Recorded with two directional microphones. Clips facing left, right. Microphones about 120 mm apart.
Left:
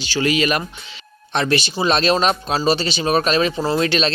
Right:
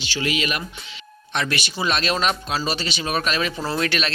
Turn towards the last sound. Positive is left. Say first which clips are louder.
# left 5 dB
turn(degrees=25)  # may be behind; listen again after turning